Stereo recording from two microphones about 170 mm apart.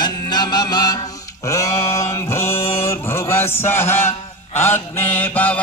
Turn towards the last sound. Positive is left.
turn(degrees=10)  # may be behind; listen again after turning